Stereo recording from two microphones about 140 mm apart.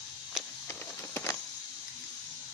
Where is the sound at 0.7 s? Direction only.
15° left (ahead or behind).